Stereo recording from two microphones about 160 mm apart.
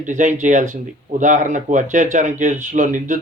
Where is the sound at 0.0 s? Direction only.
50° right (ahead or behind).